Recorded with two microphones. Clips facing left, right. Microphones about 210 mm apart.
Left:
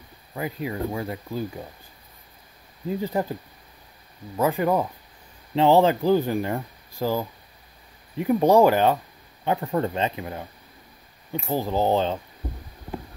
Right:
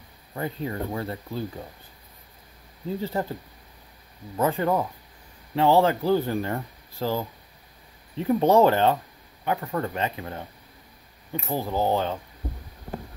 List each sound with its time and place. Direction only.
0.3 s speech: 10° left (ahead or behind)
2.9 s speech: 15° left (ahead or behind)
4.4 s speech: 15° left (ahead or behind)
9.4 s speech: 25° left (ahead or behind)
11.4 s speech: 15° left (ahead or behind)